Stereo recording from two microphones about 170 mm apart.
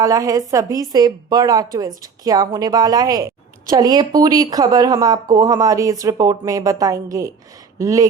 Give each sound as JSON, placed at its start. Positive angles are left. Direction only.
{"t": 0.0, "sound": "speech", "side_deg": -20}